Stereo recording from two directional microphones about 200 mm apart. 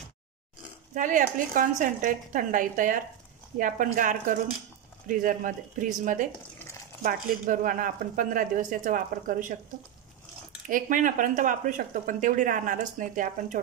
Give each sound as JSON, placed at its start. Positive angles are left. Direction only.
{"t": 0.9, "sound": "speech", "side_deg": -40}
{"t": 7.0, "sound": "speech", "side_deg": -40}
{"t": 10.7, "sound": "speech", "side_deg": -45}